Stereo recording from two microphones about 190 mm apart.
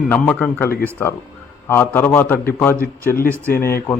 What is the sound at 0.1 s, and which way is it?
A man's voice, 5° left (ahead or behind).